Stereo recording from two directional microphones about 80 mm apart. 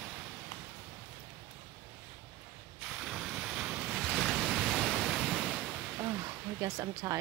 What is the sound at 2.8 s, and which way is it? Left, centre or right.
Mechanisms, centre.